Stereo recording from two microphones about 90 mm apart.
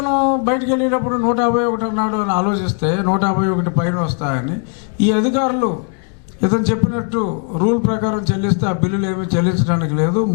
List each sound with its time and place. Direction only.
0.0 s a man's voice: 15° left (ahead or behind)